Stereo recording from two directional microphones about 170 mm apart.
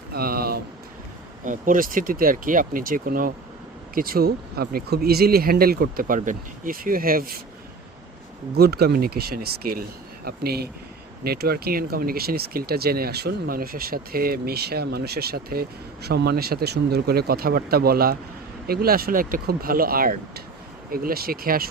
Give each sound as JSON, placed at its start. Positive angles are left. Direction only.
{"t": 0.1, "sound": "a sound", "side_deg": -65}
{"t": 1.5, "sound": "speech", "side_deg": -50}
{"t": 8.5, "sound": "speech", "side_deg": -65}